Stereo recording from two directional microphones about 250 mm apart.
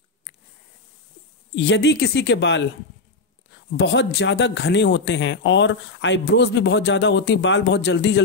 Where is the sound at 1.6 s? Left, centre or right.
Left.